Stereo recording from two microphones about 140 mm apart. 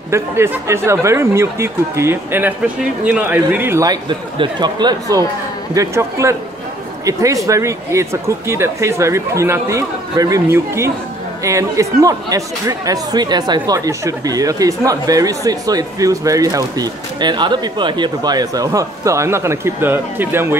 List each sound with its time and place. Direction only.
0.1 s speech: 20° right (ahead or behind)